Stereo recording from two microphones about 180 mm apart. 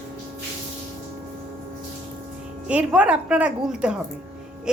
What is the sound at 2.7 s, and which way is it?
A woman's voice, 5° right (ahead or behind).